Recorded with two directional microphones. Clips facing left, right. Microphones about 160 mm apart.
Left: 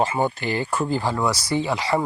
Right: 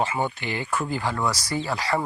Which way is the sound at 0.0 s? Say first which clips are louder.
Left 4 dB; 35° left (ahead or behind).